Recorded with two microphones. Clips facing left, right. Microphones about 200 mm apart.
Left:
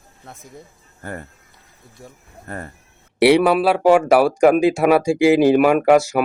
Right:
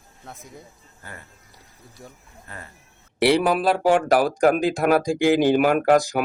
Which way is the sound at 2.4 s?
50° left (ahead or behind).